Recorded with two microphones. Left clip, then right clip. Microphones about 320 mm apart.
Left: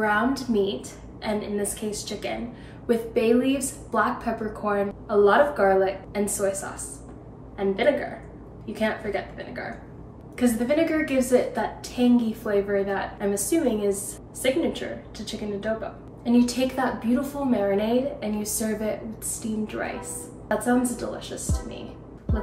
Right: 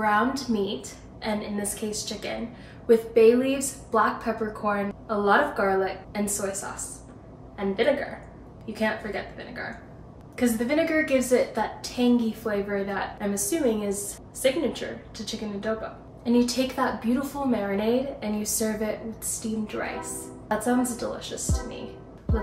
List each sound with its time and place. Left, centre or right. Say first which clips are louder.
0.0 s a woman's voice: even; centre
7.5 s a woman's voice: left 2 dB; centre
20.4 s a woman's voice: left 2 dB; centre